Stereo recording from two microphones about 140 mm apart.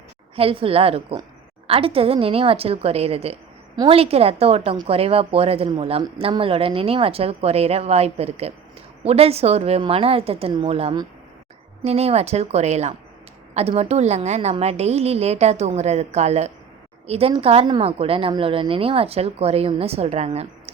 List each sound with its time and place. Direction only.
0.3 s a woman's voice: 40° right (ahead or behind)